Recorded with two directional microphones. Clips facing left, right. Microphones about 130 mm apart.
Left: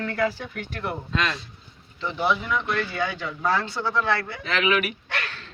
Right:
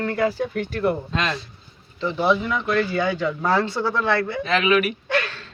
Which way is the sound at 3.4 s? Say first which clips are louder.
Right 2 dB; 30° right (ahead or behind).